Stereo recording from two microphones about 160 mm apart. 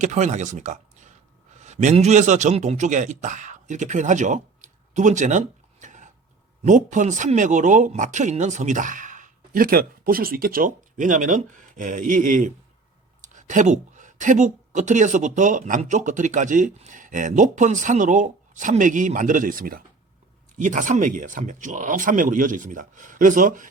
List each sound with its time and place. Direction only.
0.0 s a man's voice: 50° right (ahead or behind); by 19.8 s 65° right (ahead or behind)
20.6 s speech: 55° right (ahead or behind)